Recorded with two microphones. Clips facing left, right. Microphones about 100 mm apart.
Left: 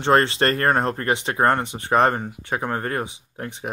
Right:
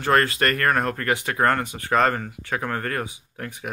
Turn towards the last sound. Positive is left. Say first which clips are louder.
# left 2 dB
turn(degrees=25)  # may be behind; listen again after turning